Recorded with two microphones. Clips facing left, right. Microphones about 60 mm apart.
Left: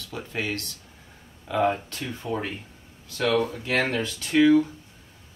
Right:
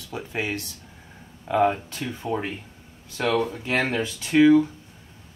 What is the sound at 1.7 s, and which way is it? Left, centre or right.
Speech, centre.